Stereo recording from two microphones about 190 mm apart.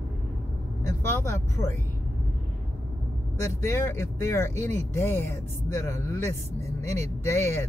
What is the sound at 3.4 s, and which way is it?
Speech, 15° left (ahead or behind).